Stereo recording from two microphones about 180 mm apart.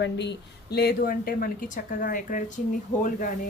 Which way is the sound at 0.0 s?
75° left (ahead or behind).